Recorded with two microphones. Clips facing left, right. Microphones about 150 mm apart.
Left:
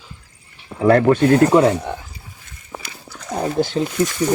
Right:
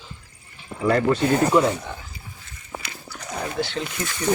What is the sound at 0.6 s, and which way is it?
Speech, 60° left (ahead or behind).